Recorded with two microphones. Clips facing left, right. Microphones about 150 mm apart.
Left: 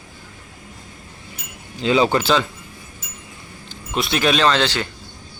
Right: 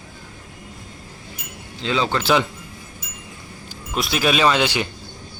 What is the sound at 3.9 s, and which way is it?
Speech, centre (ahead or behind).